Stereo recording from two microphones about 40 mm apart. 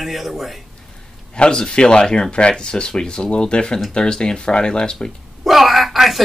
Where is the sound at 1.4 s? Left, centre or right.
Centre.